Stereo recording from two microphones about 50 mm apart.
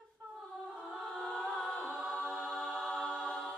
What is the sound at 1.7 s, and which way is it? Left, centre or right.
Music, centre.